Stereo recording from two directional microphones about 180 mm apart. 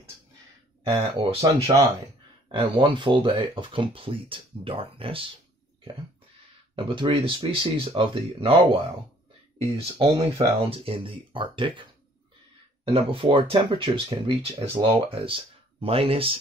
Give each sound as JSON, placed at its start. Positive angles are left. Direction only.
{"t": 0.8, "sound": "speech", "side_deg": -35}
{"t": 6.7, "sound": "speech", "side_deg": -25}